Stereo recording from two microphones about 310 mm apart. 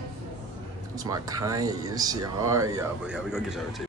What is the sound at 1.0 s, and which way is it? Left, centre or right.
Speech, centre.